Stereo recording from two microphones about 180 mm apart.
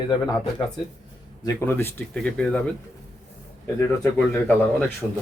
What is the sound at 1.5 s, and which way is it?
Speech, 15° left (ahead or behind).